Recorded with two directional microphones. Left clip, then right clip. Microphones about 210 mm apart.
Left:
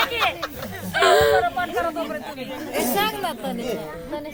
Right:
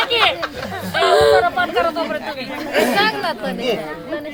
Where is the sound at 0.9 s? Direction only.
5° left (ahead or behind).